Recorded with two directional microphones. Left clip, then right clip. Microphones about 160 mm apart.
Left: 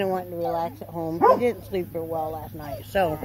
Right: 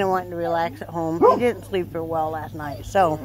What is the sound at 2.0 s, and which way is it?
Speech, 30° right (ahead or behind).